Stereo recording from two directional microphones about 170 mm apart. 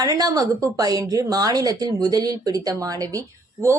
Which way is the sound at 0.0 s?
20° right (ahead or behind).